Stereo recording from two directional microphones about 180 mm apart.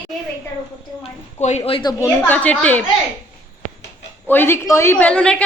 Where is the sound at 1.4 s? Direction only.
40° left (ahead or behind).